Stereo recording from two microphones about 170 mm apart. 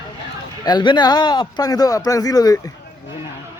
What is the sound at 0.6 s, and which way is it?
Speech, 25° left (ahead or behind).